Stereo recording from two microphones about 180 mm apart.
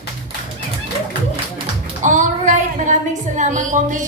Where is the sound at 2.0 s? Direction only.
45° right (ahead or behind).